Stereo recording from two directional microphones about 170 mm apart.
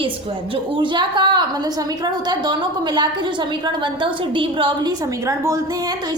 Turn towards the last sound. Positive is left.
turn(degrees=-25)  # may be behind; listen again after turning